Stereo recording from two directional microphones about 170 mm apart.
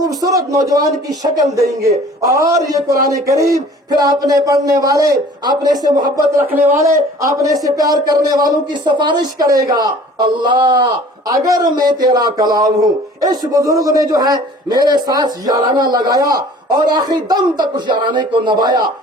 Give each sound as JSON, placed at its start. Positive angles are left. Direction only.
{"t": 0.0, "sound": "a man's voice", "side_deg": -20}
{"t": 6.5, "sound": "a man's voice", "side_deg": -10}